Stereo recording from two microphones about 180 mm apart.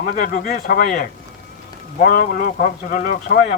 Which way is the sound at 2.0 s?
50° left (ahead or behind).